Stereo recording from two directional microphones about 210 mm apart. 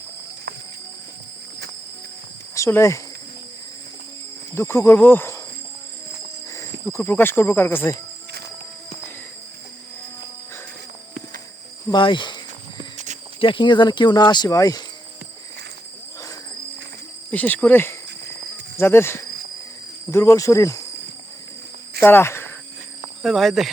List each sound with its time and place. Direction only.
2.6 s speech: 15° left (ahead or behind)
4.5 s speech: 10° left (ahead or behind)
6.5 s speech: 15° left (ahead or behind)
11.9 s speech: 25° left (ahead or behind)
13.4 s speech: 25° left (ahead or behind)
17.3 s speech: 10° left (ahead or behind)
22.0 s cricket: 10° left (ahead or behind)
23.2 s speech: centre (ahead or behind)